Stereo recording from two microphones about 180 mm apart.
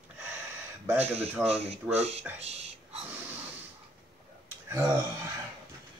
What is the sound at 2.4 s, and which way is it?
Whispering, 35° right (ahead or behind).